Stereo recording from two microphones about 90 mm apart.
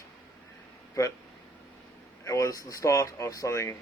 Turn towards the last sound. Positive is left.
turn(degrees=30)  # may be behind; listen again after turning